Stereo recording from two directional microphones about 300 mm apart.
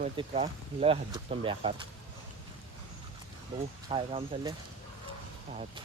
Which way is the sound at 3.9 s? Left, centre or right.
Centre.